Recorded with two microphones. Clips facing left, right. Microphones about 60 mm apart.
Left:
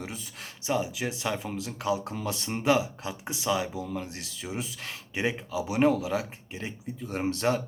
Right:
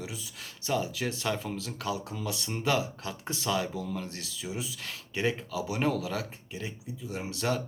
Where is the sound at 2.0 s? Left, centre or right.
Left; by 4.1 s centre.